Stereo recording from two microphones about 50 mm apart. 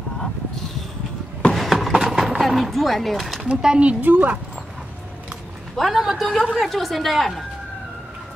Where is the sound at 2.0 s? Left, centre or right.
Centre.